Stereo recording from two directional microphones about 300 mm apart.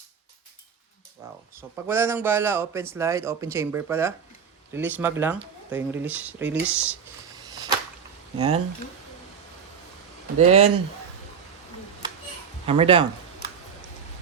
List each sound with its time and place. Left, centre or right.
1.2 s speech: centre
7.5 s whip: centre
8.4 s speech: centre
10.3 s speech: right
12.6 s speech: centre